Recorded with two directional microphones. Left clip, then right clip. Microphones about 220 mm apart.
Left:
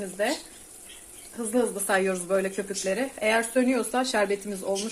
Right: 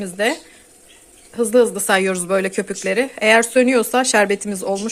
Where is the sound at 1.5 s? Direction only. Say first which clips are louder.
Right 9 dB; 45° right (ahead or behind).